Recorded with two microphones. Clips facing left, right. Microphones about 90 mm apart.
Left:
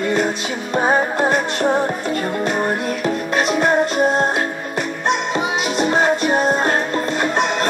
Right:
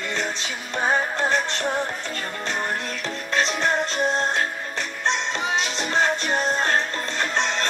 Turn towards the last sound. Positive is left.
turn(degrees=10)  # may be behind; listen again after turning